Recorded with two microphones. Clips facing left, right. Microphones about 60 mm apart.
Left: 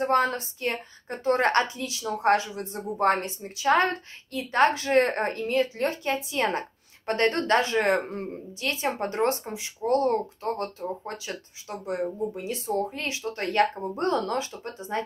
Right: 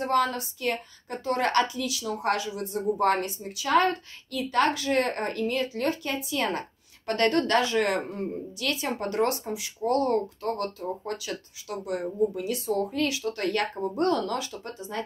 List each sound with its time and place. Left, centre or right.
0.0 s a woman's voice: left